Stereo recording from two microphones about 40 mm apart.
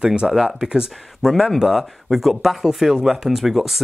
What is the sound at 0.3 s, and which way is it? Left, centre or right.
Speech, centre.